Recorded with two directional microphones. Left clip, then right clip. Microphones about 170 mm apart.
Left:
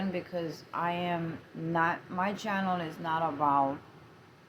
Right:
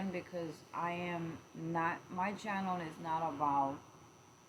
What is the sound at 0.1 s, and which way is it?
Speech, 25° left (ahead or behind).